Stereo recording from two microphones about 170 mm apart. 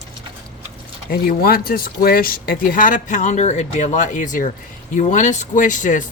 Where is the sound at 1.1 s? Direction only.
60° left (ahead or behind).